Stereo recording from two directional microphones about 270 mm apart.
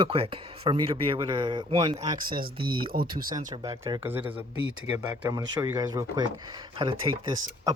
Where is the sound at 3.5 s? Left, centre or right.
Centre.